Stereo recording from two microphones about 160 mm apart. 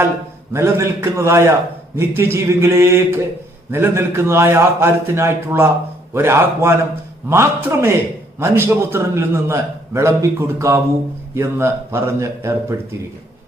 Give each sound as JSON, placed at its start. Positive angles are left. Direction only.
{"t": 0.5, "sound": "a man's voice", "side_deg": -15}